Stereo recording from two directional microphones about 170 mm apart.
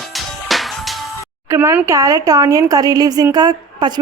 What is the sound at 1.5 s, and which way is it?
Speech, 15° right (ahead or behind).